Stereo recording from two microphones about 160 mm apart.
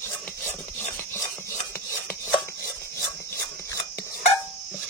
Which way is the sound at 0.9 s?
15° left (ahead or behind).